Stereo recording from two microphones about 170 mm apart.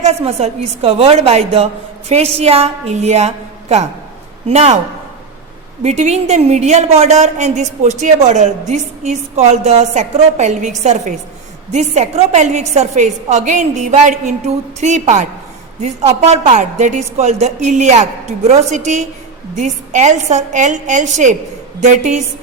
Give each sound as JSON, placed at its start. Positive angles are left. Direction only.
{"t": 0.0, "sound": "a woman's voice", "side_deg": -35}
{"t": 5.8, "sound": "a woman's voice", "side_deg": -40}